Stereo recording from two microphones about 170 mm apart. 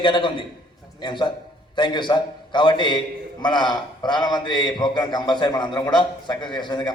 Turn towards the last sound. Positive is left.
turn(degrees=25)  # may be behind; listen again after turning